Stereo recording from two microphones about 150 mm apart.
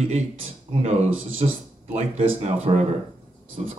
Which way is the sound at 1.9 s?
45° right (ahead or behind).